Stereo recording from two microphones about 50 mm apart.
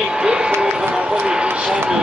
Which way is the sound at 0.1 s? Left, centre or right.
Centre.